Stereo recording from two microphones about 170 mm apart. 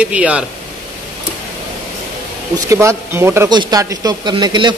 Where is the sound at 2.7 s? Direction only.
15° right (ahead or behind).